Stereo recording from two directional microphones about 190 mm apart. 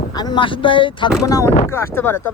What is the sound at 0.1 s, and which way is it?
Speech, 20° left (ahead or behind).